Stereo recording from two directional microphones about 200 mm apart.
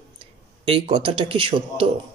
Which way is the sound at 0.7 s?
25° right (ahead or behind).